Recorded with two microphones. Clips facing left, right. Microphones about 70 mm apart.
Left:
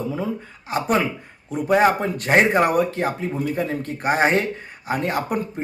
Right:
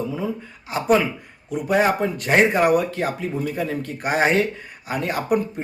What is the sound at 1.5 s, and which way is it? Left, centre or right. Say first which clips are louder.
Speech: left 2 dB; left.